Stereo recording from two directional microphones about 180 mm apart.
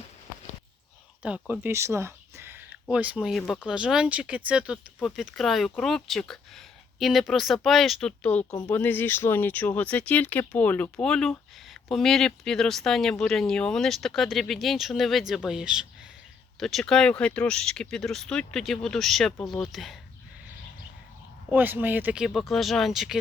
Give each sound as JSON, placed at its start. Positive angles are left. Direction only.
{"t": 1.2, "sound": "speech", "side_deg": -10}
{"t": 8.4, "sound": "speech", "side_deg": 20}
{"t": 8.7, "sound": "speech", "side_deg": 10}
{"t": 21.5, "sound": "speech", "side_deg": -10}